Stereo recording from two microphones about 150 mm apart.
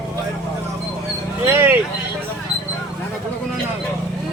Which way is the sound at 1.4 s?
15° right (ahead or behind).